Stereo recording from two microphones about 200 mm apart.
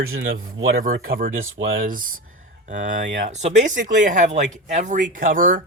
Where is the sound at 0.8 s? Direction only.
45° right (ahead or behind).